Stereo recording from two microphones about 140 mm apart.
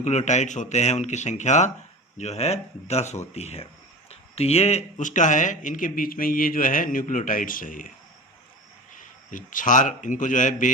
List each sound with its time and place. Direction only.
0.0 s speech: 55° left (ahead or behind); by 7.9 s 70° left (ahead or behind)
9.0 s a man's voice: 70° left (ahead or behind)